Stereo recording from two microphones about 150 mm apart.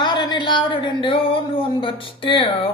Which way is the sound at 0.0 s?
30° left (ahead or behind).